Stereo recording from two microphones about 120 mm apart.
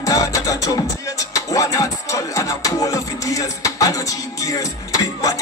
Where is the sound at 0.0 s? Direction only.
30° left (ahead or behind).